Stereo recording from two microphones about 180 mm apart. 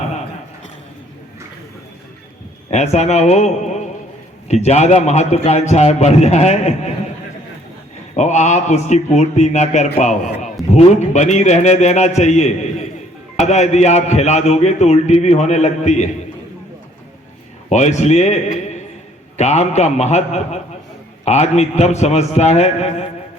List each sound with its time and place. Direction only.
2.6 s a man's voice: 35° left (ahead or behind)
8.1 s a man's voice: 40° left (ahead or behind)
17.7 s a man's voice: 40° left (ahead or behind)